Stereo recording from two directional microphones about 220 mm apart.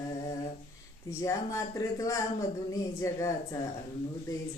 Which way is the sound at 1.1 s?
15° left (ahead or behind).